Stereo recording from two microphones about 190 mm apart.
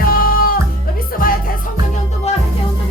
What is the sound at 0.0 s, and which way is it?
Music, 50° left (ahead or behind).